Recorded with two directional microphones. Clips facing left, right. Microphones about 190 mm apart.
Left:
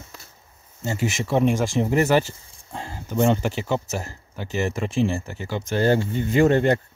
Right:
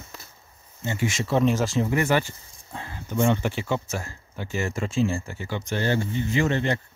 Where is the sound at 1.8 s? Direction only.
35° left (ahead or behind).